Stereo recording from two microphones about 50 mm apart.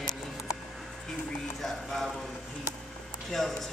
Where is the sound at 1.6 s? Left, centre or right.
Centre.